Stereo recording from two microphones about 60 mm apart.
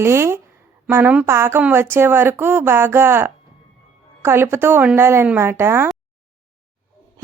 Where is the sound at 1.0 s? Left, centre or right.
Right.